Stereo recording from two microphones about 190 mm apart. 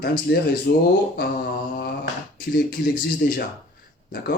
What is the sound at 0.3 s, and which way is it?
Speech, 55° left (ahead or behind).